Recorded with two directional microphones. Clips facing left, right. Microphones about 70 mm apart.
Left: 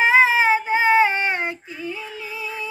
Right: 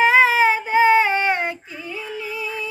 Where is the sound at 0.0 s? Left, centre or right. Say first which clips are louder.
Right 1 dB; left.